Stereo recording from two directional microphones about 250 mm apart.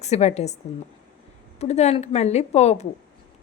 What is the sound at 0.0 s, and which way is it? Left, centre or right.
A woman's voice, left.